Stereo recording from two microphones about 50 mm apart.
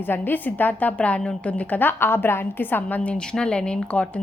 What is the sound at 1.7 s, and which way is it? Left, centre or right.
A woman's voice, left.